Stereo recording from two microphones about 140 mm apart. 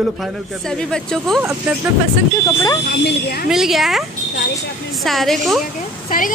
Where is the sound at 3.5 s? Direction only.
Centre (ahead or behind).